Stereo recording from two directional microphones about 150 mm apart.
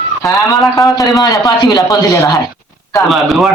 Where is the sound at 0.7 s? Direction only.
25° left (ahead or behind).